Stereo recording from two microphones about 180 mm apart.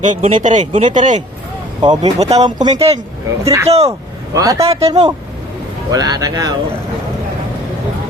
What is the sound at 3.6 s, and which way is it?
Speech, 35° right (ahead or behind).